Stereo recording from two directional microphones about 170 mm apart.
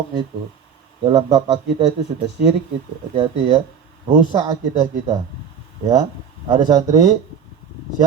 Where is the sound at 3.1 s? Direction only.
35° right (ahead or behind).